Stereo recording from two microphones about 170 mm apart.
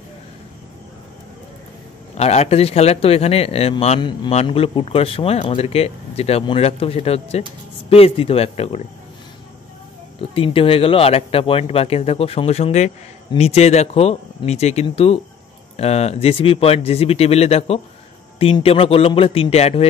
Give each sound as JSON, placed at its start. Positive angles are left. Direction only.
{"t": 2.1, "sound": "speech", "side_deg": 40}
{"t": 10.3, "sound": "speech", "side_deg": 35}